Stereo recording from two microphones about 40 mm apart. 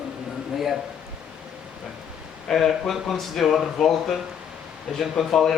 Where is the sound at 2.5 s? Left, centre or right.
Centre.